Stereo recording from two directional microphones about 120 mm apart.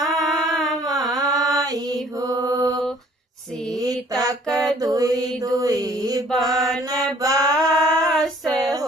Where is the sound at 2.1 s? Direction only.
30° right (ahead or behind).